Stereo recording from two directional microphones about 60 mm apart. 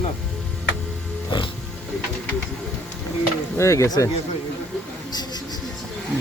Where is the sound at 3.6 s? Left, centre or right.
Left.